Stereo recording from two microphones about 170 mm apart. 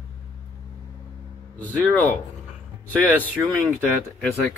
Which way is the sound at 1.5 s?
10° left (ahead or behind).